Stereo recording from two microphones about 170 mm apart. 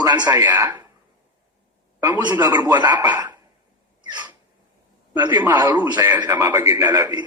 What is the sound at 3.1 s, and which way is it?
Cough, 10° right (ahead or behind).